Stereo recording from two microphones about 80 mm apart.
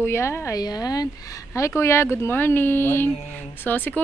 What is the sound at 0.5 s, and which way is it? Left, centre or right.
Speech, left.